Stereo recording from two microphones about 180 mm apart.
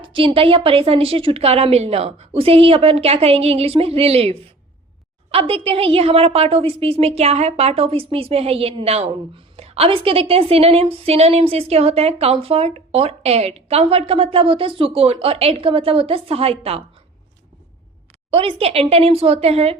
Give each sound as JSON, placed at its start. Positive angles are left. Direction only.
{"t": 0.0, "sound": "a woman's voice", "side_deg": -25}
{"t": 18.3, "sound": "a woman's voice", "side_deg": -30}